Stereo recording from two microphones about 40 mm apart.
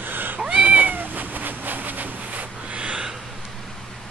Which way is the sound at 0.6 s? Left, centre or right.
Right.